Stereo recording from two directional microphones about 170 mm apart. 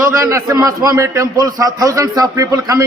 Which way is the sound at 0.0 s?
15° right (ahead or behind).